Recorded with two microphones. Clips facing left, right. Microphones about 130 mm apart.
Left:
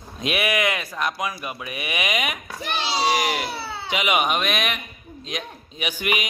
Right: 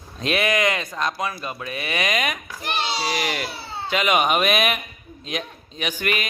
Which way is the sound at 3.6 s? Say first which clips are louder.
Left 1 dB; 75° left (ahead or behind).